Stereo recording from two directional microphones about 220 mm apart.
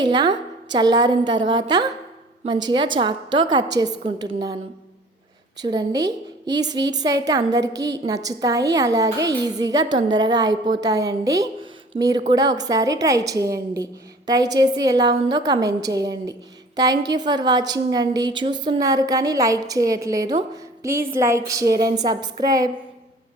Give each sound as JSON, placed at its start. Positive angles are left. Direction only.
{"t": 0.0, "sound": "a woman's voice", "side_deg": -20}
{"t": 5.6, "sound": "a woman's voice", "side_deg": -15}